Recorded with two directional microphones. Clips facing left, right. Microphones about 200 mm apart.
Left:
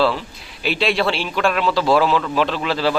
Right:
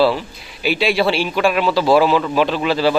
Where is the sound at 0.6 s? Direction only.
Centre (ahead or behind).